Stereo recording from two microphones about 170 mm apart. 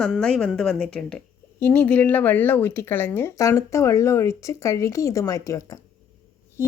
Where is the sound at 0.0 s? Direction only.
5° left (ahead or behind).